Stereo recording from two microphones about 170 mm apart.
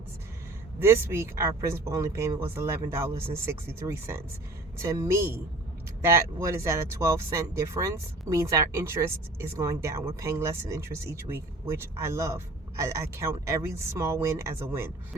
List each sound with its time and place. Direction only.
0.8 s speech: 15° right (ahead or behind)